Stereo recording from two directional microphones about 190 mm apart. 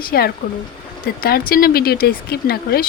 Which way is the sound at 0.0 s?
55° left (ahead or behind).